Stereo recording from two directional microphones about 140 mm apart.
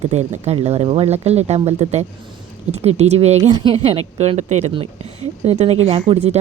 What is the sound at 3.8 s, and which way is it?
Speech, 50° right (ahead or behind).